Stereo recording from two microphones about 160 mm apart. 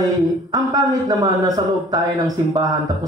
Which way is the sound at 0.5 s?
20° right (ahead or behind).